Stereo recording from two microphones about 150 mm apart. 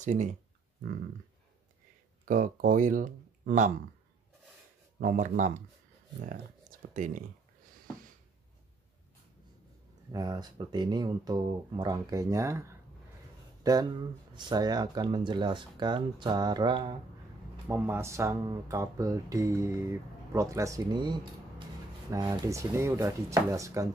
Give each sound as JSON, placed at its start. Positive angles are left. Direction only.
{"t": 0.0, "sound": "speech", "side_deg": -55}
{"t": 2.2, "sound": "speech", "side_deg": -65}
{"t": 5.0, "sound": "speech", "side_deg": -60}
{"t": 6.9, "sound": "speech", "side_deg": -55}
{"t": 10.1, "sound": "speech", "side_deg": -25}
{"t": 17.6, "sound": "speech", "side_deg": -15}